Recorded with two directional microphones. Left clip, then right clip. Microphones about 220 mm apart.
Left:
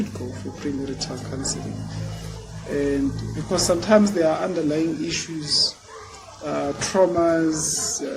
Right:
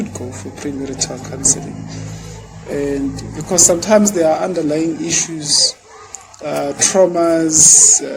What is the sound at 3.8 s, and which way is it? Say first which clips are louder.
Speech: right 5 dB; 30° right (ahead or behind).